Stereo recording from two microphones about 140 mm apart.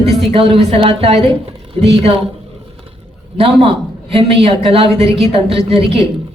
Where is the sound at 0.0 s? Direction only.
45° right (ahead or behind).